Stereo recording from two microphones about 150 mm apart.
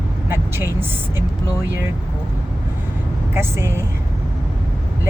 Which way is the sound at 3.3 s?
15° right (ahead or behind).